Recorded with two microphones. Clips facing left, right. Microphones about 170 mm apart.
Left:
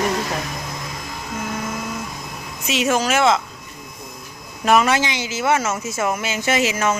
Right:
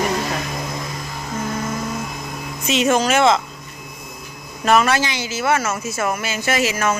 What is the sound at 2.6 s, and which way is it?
Speech, 5° left (ahead or behind).